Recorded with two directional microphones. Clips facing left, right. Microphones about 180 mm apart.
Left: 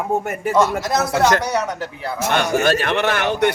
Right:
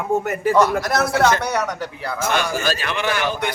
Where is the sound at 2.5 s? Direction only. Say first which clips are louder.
Left 6 dB; 65° left (ahead or behind).